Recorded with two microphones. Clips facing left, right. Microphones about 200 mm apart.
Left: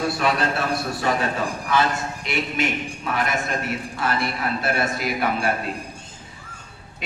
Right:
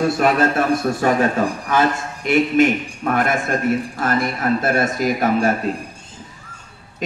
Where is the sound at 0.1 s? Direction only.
45° right (ahead or behind).